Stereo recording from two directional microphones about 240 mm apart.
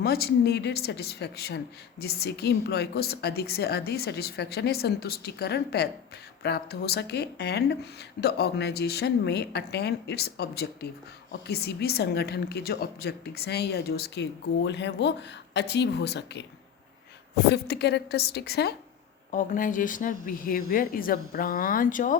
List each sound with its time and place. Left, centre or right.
0.0 s a woman's voice: left